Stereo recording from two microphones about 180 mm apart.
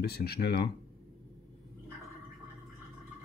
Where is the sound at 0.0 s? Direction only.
60° left (ahead or behind).